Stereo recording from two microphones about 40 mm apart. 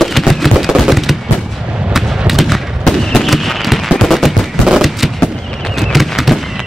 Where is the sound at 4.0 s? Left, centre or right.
Centre.